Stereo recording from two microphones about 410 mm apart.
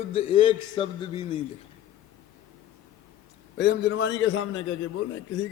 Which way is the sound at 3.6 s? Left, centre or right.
Left.